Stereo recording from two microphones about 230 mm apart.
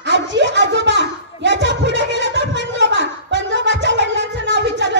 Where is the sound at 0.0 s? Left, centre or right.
Right.